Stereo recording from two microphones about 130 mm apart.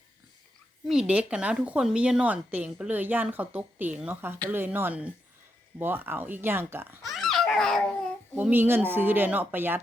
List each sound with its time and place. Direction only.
0.9 s a woman's voice: 5° right (ahead or behind)
7.0 s babbling: centre (ahead or behind)
8.4 s a woman's voice: 15° right (ahead or behind)